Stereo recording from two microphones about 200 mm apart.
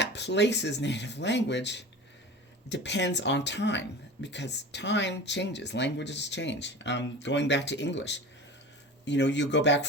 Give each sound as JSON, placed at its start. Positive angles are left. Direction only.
{"t": 0.0, "sound": "speech", "side_deg": 60}